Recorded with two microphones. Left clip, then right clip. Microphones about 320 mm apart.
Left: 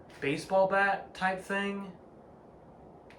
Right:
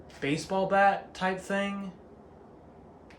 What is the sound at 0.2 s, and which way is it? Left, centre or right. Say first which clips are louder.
Speech: left 2 dB; centre.